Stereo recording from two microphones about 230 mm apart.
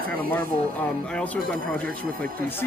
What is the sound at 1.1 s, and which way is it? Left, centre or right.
Speech, centre.